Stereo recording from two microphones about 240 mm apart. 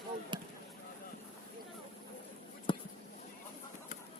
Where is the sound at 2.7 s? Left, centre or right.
Left.